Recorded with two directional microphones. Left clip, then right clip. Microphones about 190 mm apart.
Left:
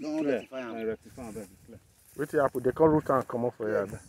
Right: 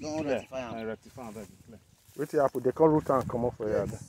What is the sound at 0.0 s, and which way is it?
Speech, 60° right (ahead or behind).